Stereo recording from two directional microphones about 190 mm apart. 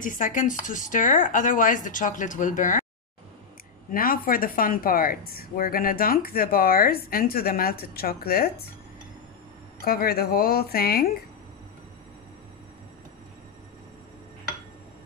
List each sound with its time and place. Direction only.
0.0 s speech: 45° left (ahead or behind)
3.9 s speech: 50° left (ahead or behind)
9.8 s speech: 55° left (ahead or behind)